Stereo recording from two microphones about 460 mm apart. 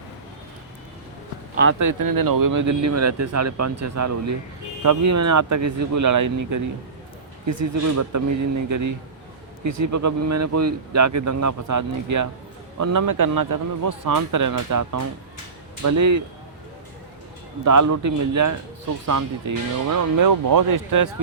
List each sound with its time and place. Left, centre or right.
1.8 s speech: right
7.9 s speech: right
9.8 s speech: right
17.7 s speech: right